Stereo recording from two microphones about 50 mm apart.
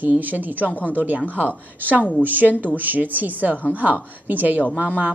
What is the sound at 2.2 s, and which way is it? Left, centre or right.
A woman's voice, right.